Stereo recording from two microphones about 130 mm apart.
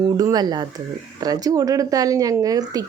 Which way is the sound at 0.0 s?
30° right (ahead or behind).